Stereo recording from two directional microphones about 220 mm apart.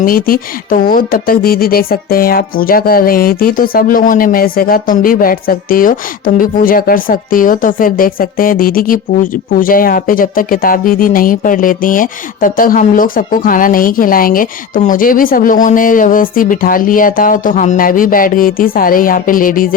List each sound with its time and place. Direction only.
0.0 s speech: 40° left (ahead or behind)